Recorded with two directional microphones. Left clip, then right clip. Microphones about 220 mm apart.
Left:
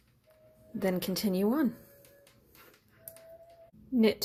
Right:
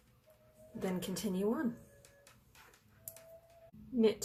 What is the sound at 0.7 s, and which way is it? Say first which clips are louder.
Speech: left 8 dB; 35° left (ahead or behind).